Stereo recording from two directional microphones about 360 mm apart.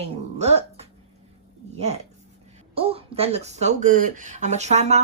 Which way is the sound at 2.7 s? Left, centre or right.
Centre.